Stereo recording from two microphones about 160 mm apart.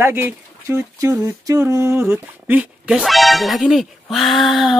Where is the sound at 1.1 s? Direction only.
15° right (ahead or behind).